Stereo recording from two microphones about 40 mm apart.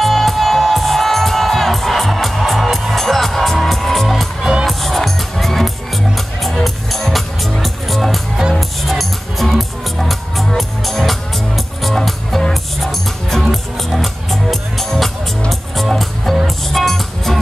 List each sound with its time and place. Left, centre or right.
0.0 s music: centre